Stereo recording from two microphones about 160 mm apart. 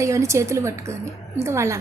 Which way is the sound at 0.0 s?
20° right (ahead or behind).